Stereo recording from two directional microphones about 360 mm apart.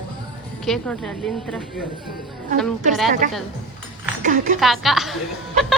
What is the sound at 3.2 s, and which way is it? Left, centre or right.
Speech, right.